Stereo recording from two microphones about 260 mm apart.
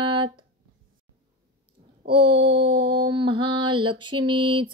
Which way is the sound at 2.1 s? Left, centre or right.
Centre.